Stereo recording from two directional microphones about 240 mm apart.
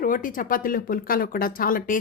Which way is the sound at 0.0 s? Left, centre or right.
Left.